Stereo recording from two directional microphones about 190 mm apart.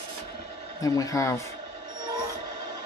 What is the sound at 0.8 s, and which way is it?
Speech, 20° left (ahead or behind).